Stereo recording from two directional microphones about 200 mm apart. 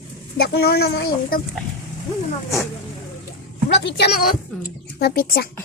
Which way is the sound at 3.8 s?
55° left (ahead or behind).